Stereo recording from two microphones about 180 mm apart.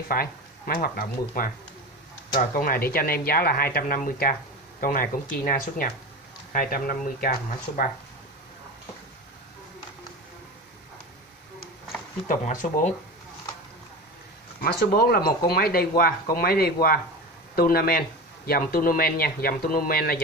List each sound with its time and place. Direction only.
0.1 s speech: 55° left (ahead or behind)
2.5 s speech: 55° left (ahead or behind)
12.3 s speech: 45° left (ahead or behind)
14.6 s speech: 60° left (ahead or behind)